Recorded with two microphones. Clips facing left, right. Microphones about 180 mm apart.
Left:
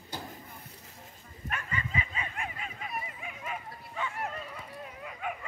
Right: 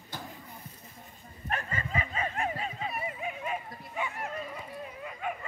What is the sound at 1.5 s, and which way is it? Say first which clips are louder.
Bow-wow: right 2 dB; 40° right (ahead or behind).